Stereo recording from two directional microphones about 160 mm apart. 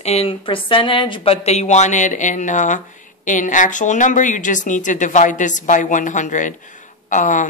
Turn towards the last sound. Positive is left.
turn(degrees=50)  # may be behind; listen again after turning